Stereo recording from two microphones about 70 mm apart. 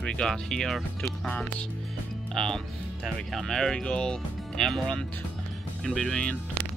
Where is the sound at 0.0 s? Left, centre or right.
Centre.